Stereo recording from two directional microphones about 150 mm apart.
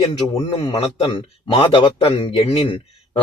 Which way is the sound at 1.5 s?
35° left (ahead or behind).